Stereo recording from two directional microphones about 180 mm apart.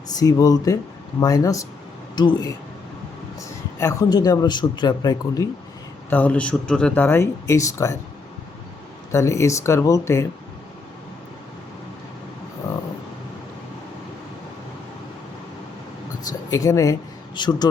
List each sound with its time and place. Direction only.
0.2 s speech: 20° left (ahead or behind)
3.8 s speech: 20° left (ahead or behind)
6.1 s speech: 10° left (ahead or behind)
9.1 s speech: 15° left (ahead or behind)
16.5 s speech: 15° left (ahead or behind)